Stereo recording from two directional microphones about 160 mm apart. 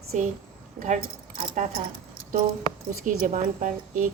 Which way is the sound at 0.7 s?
50° right (ahead or behind).